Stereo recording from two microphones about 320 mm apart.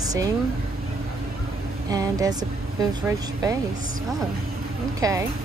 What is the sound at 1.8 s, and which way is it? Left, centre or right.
A woman's voice, centre.